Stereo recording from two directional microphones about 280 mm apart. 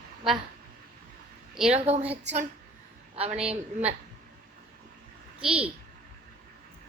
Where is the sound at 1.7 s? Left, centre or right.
Right.